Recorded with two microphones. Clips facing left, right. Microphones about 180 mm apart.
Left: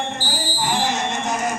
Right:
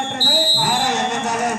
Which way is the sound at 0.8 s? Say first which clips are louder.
Right 2 dB; 75° right (ahead or behind).